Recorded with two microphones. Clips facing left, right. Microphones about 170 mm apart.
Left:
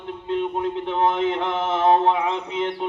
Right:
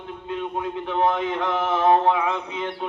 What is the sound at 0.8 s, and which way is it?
Mantra, 25° left (ahead or behind).